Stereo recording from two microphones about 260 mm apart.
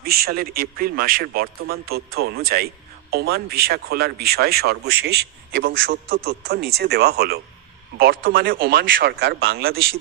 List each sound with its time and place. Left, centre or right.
0.0 s a man's voice: right